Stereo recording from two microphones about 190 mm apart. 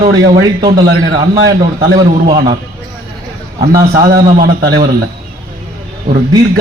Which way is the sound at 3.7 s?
20° right (ahead or behind).